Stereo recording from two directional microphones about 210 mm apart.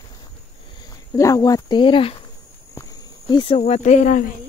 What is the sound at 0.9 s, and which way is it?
Speech, 15° left (ahead or behind).